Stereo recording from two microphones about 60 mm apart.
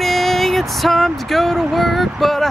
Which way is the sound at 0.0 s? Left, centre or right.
Centre.